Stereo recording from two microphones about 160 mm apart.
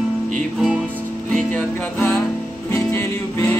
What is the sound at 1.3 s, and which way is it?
Music, 5° left (ahead or behind).